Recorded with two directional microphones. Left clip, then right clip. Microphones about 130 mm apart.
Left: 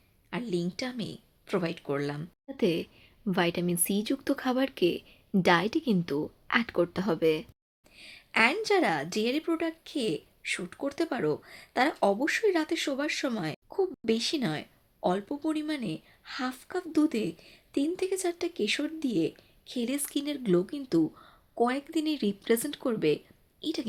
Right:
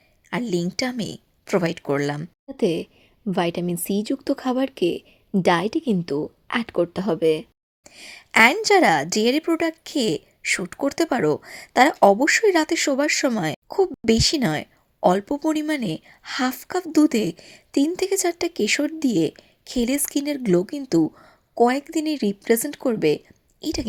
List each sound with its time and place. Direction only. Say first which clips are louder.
0.3 s speech: right 8 dB; 55° right (ahead or behind)
2.6 s a woman's voice: right 6 dB; 40° right (ahead or behind)
7.9 s a sound: right 9 dB; 55° right (ahead or behind)
8.6 s speech: right 10 dB; 55° right (ahead or behind)
15.4 s a woman's voice: right 9 dB; 50° right (ahead or behind)